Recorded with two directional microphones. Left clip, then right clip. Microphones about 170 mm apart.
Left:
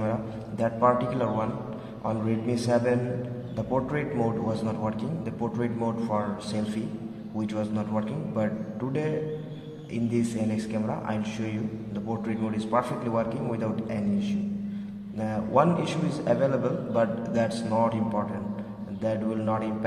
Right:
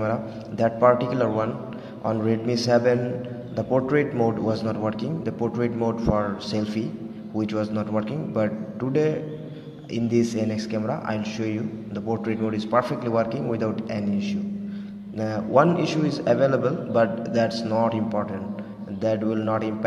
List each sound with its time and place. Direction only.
0.0 s a man's voice: 30° right (ahead or behind)
9.9 s a man's voice: 25° right (ahead or behind)